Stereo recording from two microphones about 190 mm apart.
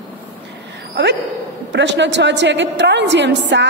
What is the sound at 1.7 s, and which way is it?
A woman's voice, 70° right (ahead or behind).